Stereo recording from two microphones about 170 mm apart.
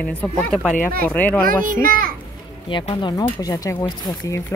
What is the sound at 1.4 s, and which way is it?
Speech, 55° right (ahead or behind).